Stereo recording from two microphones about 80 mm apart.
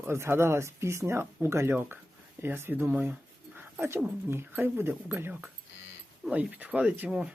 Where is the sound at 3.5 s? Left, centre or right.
Right.